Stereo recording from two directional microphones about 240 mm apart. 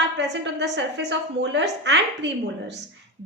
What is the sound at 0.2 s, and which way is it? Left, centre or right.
A woman's voice, right.